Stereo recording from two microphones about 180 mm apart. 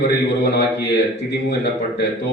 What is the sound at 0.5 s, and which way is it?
A man's voice, 65° left (ahead or behind).